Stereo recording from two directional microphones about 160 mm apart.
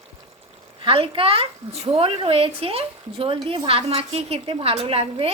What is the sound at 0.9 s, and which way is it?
A woman's voice, 35° right (ahead or behind).